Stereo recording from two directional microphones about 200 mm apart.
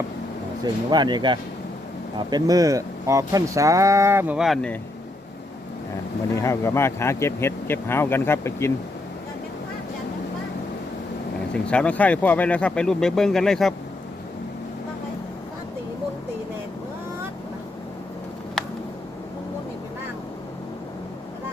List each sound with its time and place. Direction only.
0.6 s speech: 20° right (ahead or behind); by 4.8 s 5° left (ahead or behind)
6.3 s speech: 15° left (ahead or behind)
11.5 s speech: 5° left (ahead or behind)